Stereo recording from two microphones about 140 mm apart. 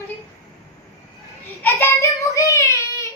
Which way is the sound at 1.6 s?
15° left (ahead or behind).